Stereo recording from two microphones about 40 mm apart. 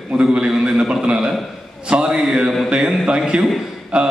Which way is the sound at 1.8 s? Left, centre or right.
Right.